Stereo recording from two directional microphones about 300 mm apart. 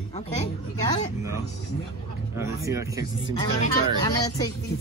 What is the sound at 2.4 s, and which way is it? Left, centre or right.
Speech, centre.